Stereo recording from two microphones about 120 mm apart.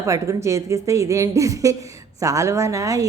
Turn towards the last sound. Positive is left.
turn(degrees=-25)  # may be behind; listen again after turning